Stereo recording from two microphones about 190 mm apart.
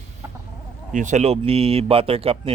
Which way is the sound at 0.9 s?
40° right (ahead or behind).